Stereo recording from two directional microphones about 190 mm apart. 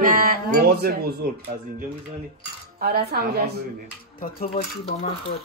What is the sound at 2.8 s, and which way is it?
Speech, 50° right (ahead or behind).